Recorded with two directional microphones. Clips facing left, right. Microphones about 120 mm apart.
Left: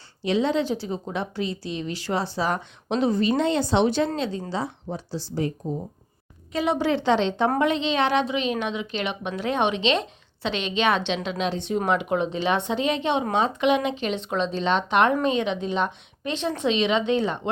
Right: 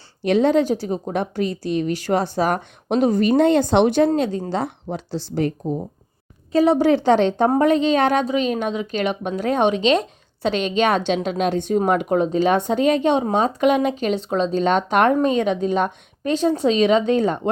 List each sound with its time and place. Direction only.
0.3 s a woman's voice: 50° right (ahead or behind)
6.5 s a woman's voice: 35° right (ahead or behind)